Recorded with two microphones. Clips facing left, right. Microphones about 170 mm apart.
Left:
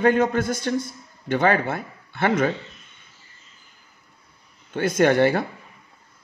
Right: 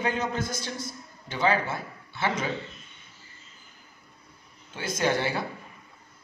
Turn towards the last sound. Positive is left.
turn(degrees=55)  # may be behind; listen again after turning